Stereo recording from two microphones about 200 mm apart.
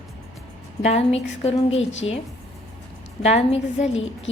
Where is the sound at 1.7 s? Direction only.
70° left (ahead or behind).